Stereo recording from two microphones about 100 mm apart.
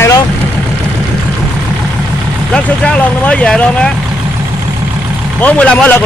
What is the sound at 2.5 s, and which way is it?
Speech, 10° left (ahead or behind).